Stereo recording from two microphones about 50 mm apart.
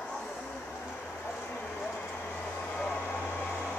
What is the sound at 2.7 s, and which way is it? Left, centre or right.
Vehicle, centre.